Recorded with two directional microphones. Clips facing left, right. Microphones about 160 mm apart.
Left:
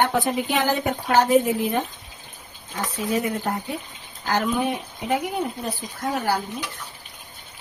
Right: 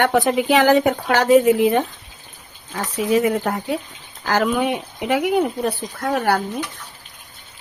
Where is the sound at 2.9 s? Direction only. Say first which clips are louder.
Right 7 dB; 90° right; by 6.4 s 60° right (ahead or behind).